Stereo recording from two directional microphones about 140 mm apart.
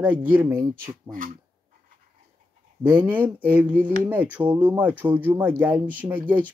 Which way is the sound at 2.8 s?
15° right (ahead or behind).